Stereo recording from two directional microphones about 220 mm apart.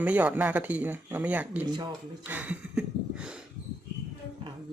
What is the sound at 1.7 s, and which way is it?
Speech, 20° right (ahead or behind).